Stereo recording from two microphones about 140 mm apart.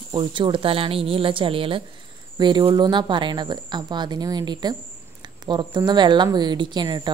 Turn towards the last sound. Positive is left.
turn(degrees=-30)  # may be behind; listen again after turning